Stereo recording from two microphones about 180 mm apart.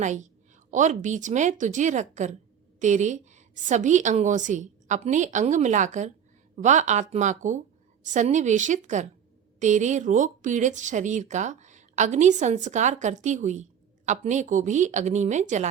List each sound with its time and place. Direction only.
0.0 s a woman's voice: 40° right (ahead or behind)